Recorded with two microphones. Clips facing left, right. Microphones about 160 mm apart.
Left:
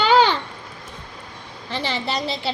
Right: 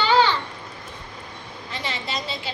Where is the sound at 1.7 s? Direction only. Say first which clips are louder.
Left 5 dB; 35° left (ahead or behind).